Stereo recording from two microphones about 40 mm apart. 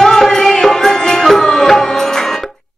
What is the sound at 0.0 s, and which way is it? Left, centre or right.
Music, centre.